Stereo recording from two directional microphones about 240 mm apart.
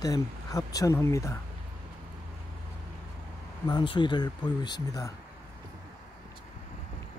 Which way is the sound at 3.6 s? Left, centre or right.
Centre.